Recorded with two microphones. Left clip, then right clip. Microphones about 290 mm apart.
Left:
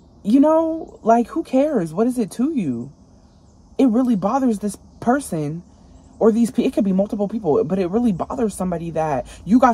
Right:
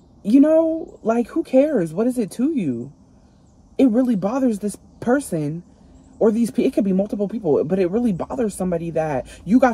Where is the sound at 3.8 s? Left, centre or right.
Centre.